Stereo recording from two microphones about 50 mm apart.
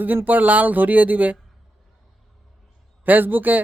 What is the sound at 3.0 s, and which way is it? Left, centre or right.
Speech, right.